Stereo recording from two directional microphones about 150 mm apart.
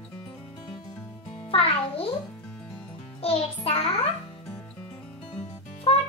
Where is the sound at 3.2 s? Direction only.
40° left (ahead or behind).